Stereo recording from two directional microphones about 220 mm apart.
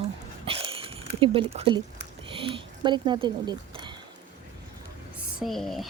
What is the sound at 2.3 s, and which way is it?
Speech, 25° right (ahead or behind).